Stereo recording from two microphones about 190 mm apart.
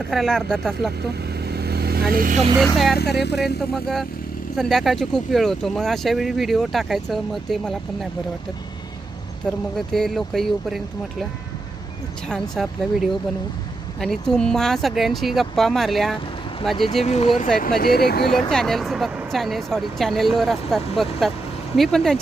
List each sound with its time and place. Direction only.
0.1 s speech: centre (ahead or behind)
1.3 s vehicle: 60° right (ahead or behind)
2.9 s speech: 60° left (ahead or behind)
3.3 s speech: centre (ahead or behind)
9.7 s speech: centre (ahead or behind)
12.3 s speech: centre (ahead or behind)
17.0 s speech: 35° left (ahead or behind)
17.7 s speech: 55° left (ahead or behind)
18.3 s speech: centre (ahead or behind)